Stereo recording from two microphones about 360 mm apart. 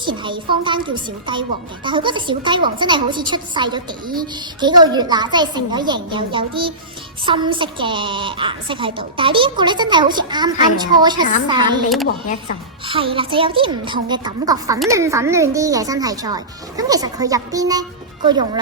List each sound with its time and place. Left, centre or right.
0.0 s a woman's voice: centre
12.0 s speech: left
12.8 s a woman's voice: centre